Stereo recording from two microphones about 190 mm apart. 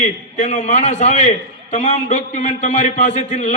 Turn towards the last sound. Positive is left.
turn(degrees=35)  # may be behind; listen again after turning